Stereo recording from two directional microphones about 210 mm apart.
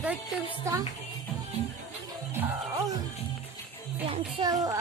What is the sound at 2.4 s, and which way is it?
Music, 10° right (ahead or behind).